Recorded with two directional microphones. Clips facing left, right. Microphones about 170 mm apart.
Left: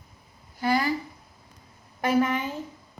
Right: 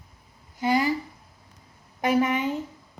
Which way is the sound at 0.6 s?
20° right (ahead or behind).